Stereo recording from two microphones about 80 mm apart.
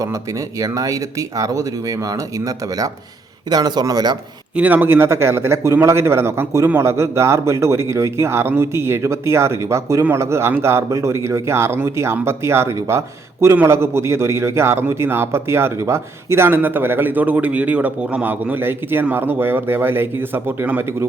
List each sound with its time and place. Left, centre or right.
0.6 s speech: right
3.5 s a man's voice: right
4.5 s a man's voice: right